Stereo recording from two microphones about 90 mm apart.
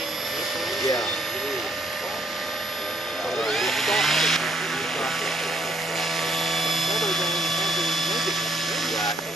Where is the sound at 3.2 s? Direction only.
Centre (ahead or behind).